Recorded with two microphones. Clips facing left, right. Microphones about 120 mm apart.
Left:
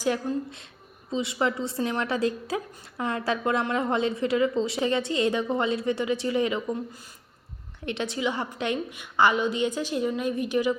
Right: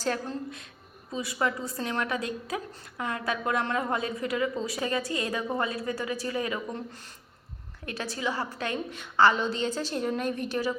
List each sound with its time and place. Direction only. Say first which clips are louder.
0.0 s a woman's voice: left 4 dB; 15° left (ahead or behind)
1.1 s a woman's voice: left 3 dB; 25° left (ahead or behind)
6.7 s a woman's voice: left 3 dB; 10° left (ahead or behind)
7.9 s a woman's voice: left 4 dB; 20° left (ahead or behind)